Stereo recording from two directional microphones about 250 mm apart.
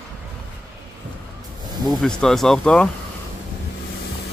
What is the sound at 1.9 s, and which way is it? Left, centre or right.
Speech, centre.